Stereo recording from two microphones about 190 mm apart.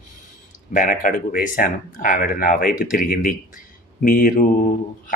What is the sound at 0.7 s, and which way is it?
Speech, 45° left (ahead or behind).